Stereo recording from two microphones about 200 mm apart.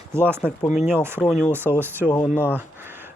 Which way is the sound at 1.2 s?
5° left (ahead or behind).